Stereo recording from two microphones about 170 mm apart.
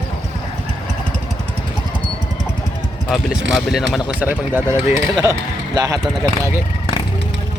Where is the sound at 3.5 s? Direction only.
Centre (ahead or behind); by 6.6 s 20° right (ahead or behind).